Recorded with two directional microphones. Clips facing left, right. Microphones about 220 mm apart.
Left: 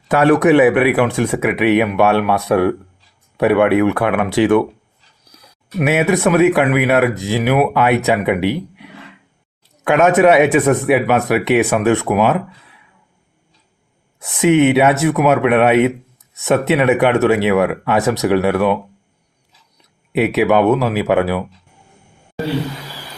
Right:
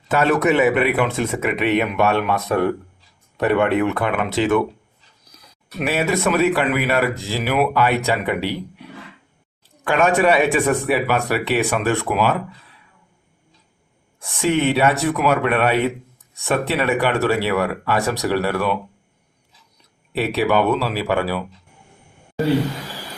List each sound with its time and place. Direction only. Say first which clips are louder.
0.1 s speech: left 6 dB; 15° left (ahead or behind)
5.9 s speech: left 5 dB; 20° left (ahead or behind)
10.0 s speech: left 5 dB; 20° left (ahead or behind)
14.3 s speech: left 7 dB; 20° left (ahead or behind)
20.1 s speech: left 5 dB; 20° left (ahead or behind)